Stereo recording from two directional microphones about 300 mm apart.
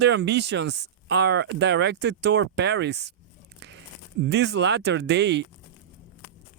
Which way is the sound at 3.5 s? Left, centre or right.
Right.